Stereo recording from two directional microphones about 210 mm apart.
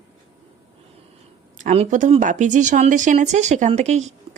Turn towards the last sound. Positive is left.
turn(degrees=-30)  # may be behind; listen again after turning